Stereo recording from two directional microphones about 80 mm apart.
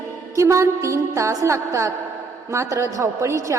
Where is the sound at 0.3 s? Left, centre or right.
Right.